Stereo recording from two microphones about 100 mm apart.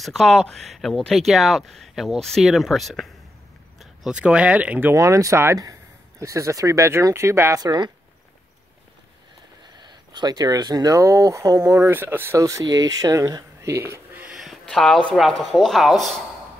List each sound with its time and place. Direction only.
0.0 s speech: 5° left (ahead or behind); by 4.9 s 15° right (ahead or behind)
4.9 s speech: 30° right (ahead or behind)
7.6 s speech: 45° right (ahead or behind)
9.8 s speech: 45° right (ahead or behind); by 14.0 s 30° right (ahead or behind)
14.1 s a sound: 15° right (ahead or behind)
14.4 s a sound: centre (ahead or behind)
15.1 s speech: centre (ahead or behind)